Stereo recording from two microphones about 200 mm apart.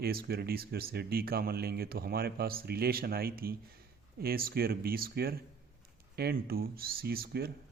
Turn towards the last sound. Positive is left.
turn(degrees=-50)  # may be behind; listen again after turning